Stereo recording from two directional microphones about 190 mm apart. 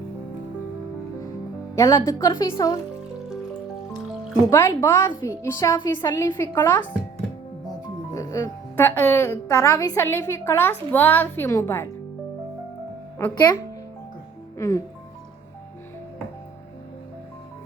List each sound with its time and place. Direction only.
1.7 s speech: 15° left (ahead or behind)
4.4 s speech: 15° left (ahead or behind)
8.1 s speech: 15° left (ahead or behind)
14.6 s speech: 15° left (ahead or behind)